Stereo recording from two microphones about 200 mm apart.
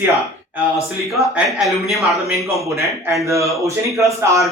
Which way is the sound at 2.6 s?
15° right (ahead or behind).